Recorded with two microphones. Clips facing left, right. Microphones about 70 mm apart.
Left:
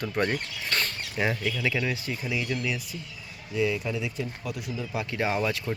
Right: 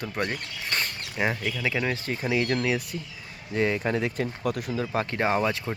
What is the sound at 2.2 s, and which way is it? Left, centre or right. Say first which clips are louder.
Speech: right 6 dB; right.